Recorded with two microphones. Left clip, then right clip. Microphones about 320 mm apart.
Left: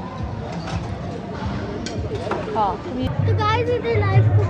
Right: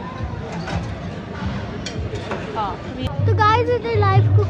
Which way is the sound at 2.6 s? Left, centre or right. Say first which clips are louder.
Left 5 dB; left.